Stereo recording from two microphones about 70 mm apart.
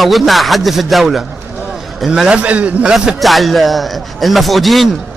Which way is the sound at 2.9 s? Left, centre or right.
Centre.